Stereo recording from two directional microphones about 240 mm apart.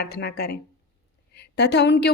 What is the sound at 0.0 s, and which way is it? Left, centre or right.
A woman's voice, left.